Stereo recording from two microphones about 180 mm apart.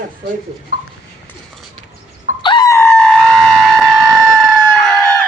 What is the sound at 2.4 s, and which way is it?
Screaming, 25° left (ahead or behind).